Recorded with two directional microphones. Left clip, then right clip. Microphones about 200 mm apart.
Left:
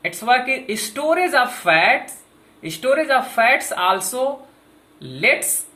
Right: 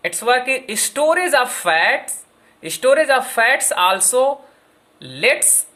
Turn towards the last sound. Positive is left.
turn(degrees=-50)  # may be behind; listen again after turning